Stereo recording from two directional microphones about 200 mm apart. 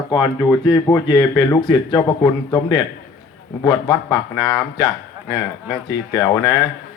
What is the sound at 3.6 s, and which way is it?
A man's voice, 20° left (ahead or behind).